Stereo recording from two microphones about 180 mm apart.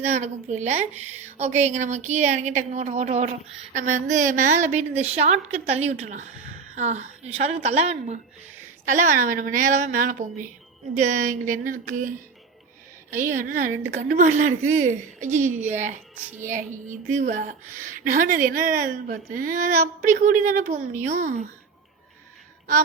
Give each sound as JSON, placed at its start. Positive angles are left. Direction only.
{"t": 0.1, "sound": "a woman's voice", "side_deg": -40}